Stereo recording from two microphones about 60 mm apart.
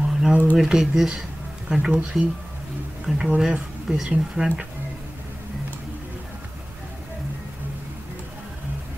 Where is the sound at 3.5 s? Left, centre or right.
Centre.